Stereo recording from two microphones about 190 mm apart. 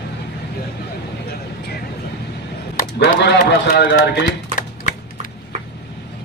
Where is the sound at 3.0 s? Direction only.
60° left (ahead or behind).